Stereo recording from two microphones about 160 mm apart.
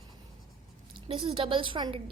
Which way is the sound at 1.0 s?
30° right (ahead or behind).